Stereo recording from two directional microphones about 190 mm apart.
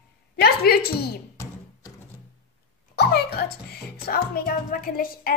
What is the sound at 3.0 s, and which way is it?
A woman's voice, 60° left (ahead or behind).